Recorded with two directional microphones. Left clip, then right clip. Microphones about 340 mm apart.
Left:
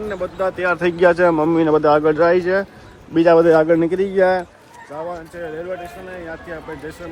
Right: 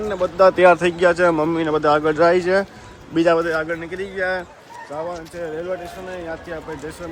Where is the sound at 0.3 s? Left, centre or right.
Centre.